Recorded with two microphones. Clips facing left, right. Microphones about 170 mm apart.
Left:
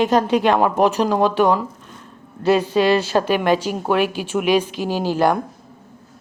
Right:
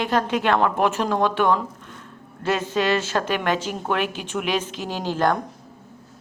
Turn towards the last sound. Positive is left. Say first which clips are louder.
# left 4 dB
turn(degrees=10)  # may be behind; listen again after turning